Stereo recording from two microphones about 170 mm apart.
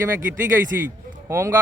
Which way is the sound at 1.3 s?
15° right (ahead or behind).